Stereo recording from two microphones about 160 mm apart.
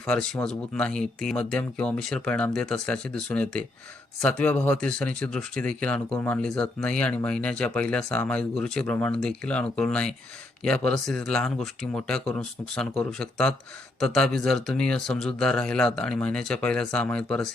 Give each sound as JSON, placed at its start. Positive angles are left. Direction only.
{"t": 0.0, "sound": "speech", "side_deg": 5}